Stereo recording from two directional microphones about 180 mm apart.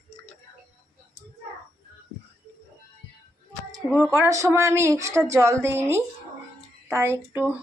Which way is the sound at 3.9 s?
15° right (ahead or behind).